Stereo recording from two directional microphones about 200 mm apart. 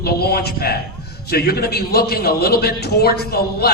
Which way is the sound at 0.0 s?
50° left (ahead or behind).